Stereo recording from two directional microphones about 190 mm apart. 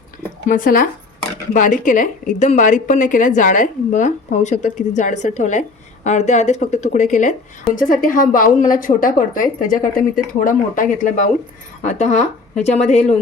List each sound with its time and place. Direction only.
0.4 s a woman's voice: 50° left (ahead or behind)